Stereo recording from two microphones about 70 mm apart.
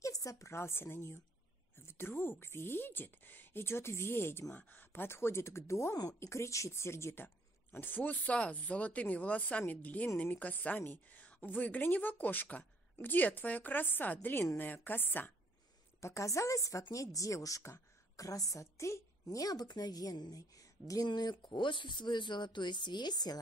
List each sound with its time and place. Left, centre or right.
0.0 s a woman's voice: left
7.7 s speech: left
16.0 s a woman's voice: left
19.2 s a woman's voice: left